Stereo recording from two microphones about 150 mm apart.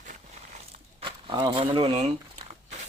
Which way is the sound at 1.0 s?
30° right (ahead or behind).